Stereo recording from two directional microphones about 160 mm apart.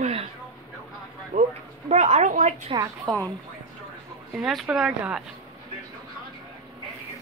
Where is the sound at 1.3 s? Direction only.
55° right (ahead or behind).